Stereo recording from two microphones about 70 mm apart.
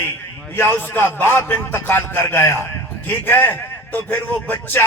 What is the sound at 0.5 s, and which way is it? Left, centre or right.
A man's voice, left.